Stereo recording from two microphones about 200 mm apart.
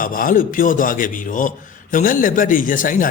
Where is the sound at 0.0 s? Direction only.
45° left (ahead or behind).